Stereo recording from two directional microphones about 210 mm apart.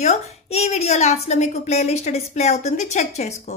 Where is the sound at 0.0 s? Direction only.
30° left (ahead or behind).